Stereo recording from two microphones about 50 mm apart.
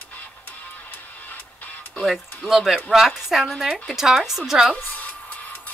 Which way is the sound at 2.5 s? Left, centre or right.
Centre.